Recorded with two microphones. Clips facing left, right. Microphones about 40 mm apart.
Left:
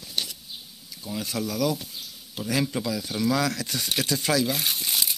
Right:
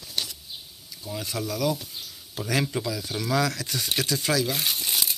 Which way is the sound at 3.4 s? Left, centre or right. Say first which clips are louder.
Left 1 dB; centre.